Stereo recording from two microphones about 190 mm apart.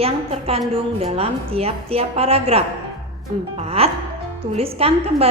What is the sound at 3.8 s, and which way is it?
A woman's voice, 30° right (ahead or behind).